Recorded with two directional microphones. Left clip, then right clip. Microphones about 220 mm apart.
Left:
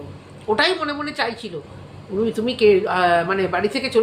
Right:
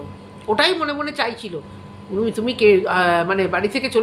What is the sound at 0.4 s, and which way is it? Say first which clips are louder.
Speech: right 1 dB; 15° right (ahead or behind).